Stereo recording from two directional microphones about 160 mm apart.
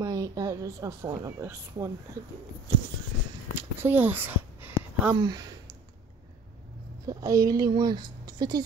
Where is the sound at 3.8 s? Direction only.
10° right (ahead or behind).